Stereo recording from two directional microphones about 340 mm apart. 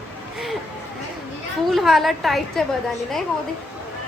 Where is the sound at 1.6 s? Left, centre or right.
Centre.